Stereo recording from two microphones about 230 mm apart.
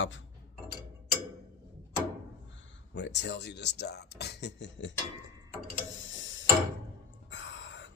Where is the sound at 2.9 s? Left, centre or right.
Left.